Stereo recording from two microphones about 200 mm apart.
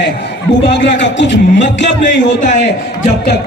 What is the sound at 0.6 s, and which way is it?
A man's voice, 60° left (ahead or behind).